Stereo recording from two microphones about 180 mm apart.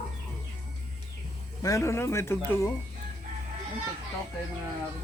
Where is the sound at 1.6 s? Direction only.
15° left (ahead or behind).